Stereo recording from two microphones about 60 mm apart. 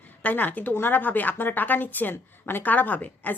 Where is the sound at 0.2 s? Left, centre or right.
Left.